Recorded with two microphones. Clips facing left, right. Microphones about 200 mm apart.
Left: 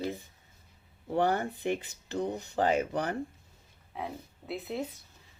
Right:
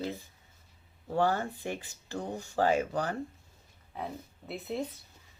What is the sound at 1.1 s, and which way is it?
Speech, 20° left (ahead or behind).